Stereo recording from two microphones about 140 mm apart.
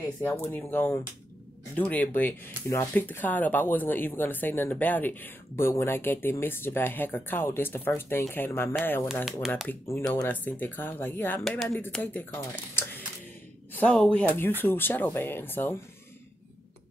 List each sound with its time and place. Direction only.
0.2 s speech: 15° left (ahead or behind)
9.0 s speech: 5° right (ahead or behind)
9.7 s speech: 20° left (ahead or behind)